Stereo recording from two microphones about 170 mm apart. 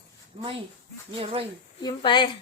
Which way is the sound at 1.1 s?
35° right (ahead or behind).